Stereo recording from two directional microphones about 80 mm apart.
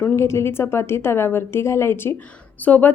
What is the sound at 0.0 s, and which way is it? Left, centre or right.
A woman's voice, left.